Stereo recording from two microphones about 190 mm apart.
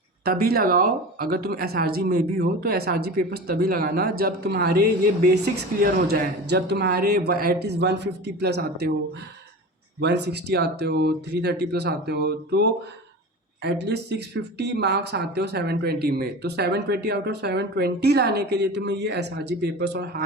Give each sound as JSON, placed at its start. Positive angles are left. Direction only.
{"t": 0.3, "sound": "speech", "side_deg": -50}
{"t": 10.0, "sound": "speech", "side_deg": -65}